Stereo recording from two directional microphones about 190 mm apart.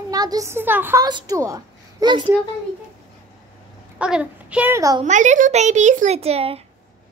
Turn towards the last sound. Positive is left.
turn(degrees=-30)  # may be behind; listen again after turning